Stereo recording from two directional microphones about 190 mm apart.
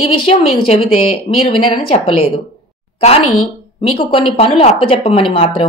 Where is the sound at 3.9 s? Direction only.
30° left (ahead or behind).